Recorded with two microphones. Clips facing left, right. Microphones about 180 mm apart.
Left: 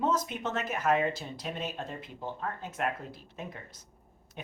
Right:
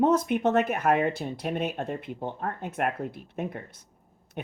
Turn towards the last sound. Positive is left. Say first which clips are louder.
# right 9 dB
turn(degrees=-60)  # may be behind; listen again after turning